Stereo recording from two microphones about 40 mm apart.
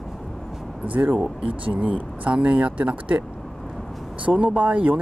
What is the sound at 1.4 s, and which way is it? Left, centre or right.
Speech, right.